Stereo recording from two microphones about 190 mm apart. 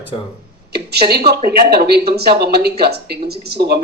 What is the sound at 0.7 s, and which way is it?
Speech, 55° right (ahead or behind).